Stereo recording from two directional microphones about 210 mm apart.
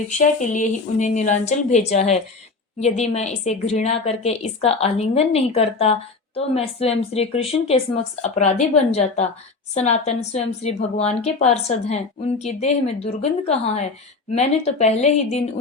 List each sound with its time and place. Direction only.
0.2 s a woman's voice: 35° left (ahead or behind)